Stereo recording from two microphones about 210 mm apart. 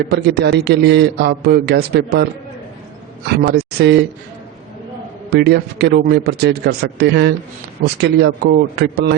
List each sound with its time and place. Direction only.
0.1 s a man's voice: 50° right (ahead or behind)
3.3 s a man's voice: 50° right (ahead or behind)
5.3 s a man's voice: 50° right (ahead or behind)